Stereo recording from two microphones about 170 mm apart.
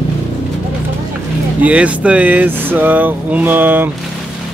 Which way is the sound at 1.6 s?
10° right (ahead or behind).